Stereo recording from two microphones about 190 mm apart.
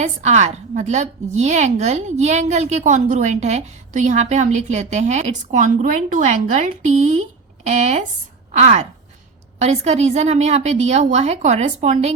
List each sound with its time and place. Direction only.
0.0 s a woman's voice: 35° right (ahead or behind)